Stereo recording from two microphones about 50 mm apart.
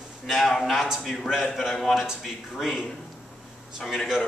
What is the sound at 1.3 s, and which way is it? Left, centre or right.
A man's voice, centre.